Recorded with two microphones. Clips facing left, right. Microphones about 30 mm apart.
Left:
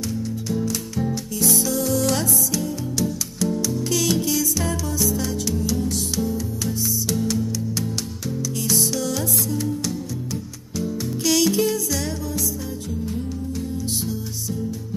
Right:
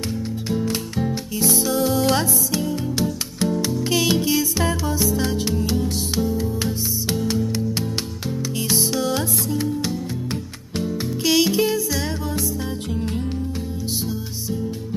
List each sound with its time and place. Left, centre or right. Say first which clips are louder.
0.7 s music: right 1 dB; right
8.7 s music: right 3 dB; right
11.2 s music: right 1 dB; right
12.9 s music: right 2 dB; right